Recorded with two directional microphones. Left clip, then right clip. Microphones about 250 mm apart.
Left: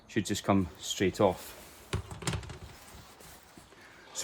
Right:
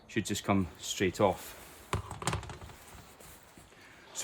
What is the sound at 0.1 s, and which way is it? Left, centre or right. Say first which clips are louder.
Speech: left 2 dB; centre.